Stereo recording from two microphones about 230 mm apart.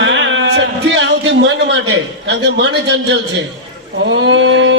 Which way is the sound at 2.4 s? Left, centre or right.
Right.